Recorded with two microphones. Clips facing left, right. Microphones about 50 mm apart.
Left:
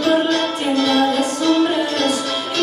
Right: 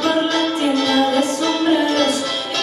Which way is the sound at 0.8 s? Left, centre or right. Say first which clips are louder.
Left 2 dB; centre.